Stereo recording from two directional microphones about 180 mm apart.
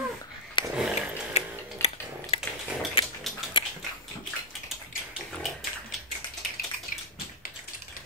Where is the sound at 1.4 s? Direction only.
35° left (ahead or behind).